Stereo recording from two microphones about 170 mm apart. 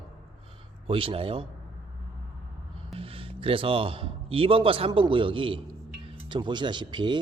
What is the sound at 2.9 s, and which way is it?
A man's voice, 35° right (ahead or behind).